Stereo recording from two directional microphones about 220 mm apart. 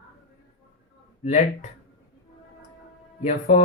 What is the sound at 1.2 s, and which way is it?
Speech, 35° left (ahead or behind).